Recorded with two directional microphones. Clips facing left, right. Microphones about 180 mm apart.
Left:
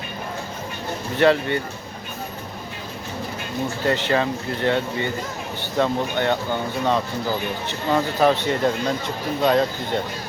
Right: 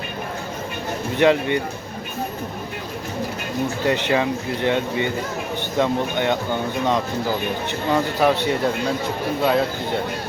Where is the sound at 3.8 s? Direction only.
15° right (ahead or behind).